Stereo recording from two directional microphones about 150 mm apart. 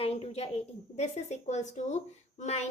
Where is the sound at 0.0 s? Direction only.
40° left (ahead or behind).